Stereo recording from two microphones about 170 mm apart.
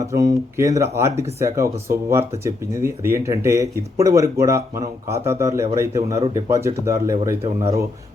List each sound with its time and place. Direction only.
0.0 s speech: 20° right (ahead or behind)